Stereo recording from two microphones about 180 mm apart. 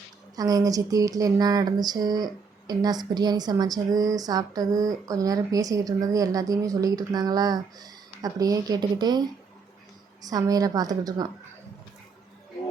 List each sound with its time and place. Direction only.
0.3 s speech: 20° right (ahead or behind)
10.2 s speech: 20° right (ahead or behind)